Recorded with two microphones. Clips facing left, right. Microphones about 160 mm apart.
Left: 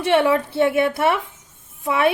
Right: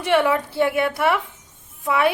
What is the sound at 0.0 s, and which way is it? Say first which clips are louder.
A woman's voice: left 2 dB; 25° left (ahead or behind).